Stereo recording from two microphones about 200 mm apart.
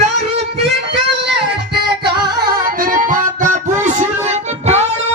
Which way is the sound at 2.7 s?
45° right (ahead or behind).